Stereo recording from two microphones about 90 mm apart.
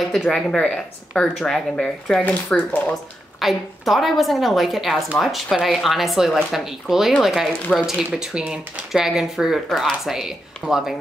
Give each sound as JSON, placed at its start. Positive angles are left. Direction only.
{"t": 0.1, "sound": "speech", "side_deg": 5}
{"t": 2.2, "sound": "speech", "side_deg": 20}
{"t": 2.9, "sound": "speech", "side_deg": 0}